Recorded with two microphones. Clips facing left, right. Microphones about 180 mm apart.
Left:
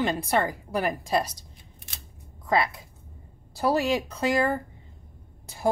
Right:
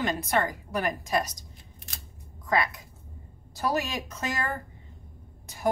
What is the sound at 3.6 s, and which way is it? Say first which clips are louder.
Speech: left 5 dB; 30° left (ahead or behind).